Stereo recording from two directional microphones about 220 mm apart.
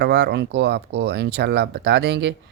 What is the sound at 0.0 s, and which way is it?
Speech, 50° right (ahead or behind).